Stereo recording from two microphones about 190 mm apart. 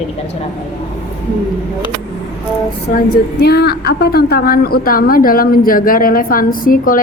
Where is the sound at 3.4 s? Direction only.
55° left (ahead or behind).